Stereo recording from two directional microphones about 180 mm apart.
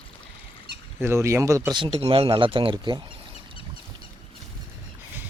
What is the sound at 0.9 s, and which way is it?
Speech, 15° right (ahead or behind).